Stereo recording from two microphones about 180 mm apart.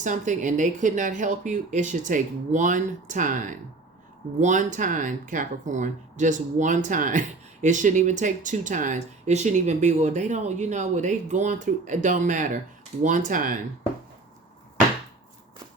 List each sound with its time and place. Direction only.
0.0 s speech: 45° right (ahead or behind)